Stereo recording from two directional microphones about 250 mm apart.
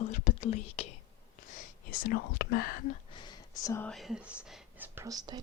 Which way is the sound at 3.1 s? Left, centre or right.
Centre.